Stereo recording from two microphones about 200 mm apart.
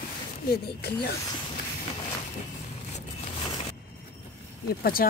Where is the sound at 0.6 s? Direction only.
55° left (ahead or behind).